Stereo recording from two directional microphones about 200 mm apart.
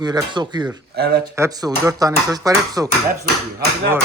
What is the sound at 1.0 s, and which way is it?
Speech, 50° right (ahead or behind).